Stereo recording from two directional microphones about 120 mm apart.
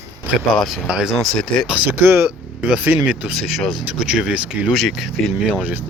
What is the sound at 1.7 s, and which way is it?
Speech, 15° right (ahead or behind).